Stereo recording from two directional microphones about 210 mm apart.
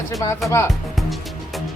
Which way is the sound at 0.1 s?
15° left (ahead or behind).